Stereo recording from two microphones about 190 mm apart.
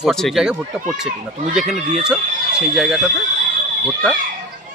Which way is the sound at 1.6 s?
35° right (ahead or behind).